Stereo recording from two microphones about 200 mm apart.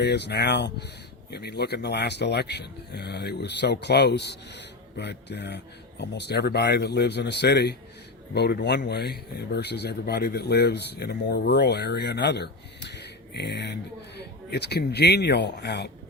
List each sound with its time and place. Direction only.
0.0 s speech: 55° left (ahead or behind)